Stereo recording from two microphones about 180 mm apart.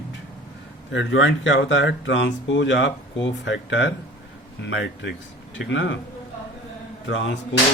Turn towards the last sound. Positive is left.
turn(degrees=90)